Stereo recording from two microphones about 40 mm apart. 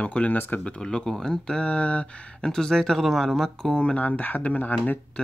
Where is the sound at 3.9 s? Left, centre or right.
Left.